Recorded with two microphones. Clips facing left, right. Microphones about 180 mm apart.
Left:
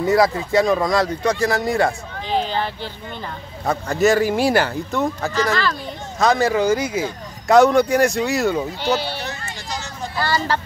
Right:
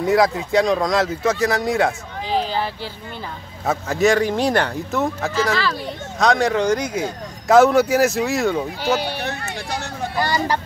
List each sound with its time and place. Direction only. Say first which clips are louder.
0.0 s speech: even; centre (ahead or behind)
8.9 s speech: right 1 dB; 15° right (ahead or behind)
9.2 s a sound: right 4 dB; 65° right (ahead or behind)
10.1 s speech: even; 15° right (ahead or behind)